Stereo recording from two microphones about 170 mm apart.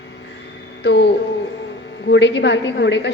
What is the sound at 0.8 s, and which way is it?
A woman's voice, 90° left.